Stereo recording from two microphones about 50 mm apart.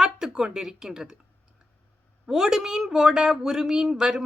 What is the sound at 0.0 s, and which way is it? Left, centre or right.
Speech, centre.